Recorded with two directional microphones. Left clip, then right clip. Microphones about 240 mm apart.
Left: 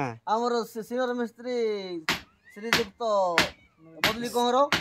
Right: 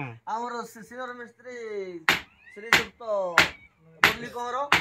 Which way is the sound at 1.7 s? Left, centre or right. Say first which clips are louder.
Right 4 dB; left.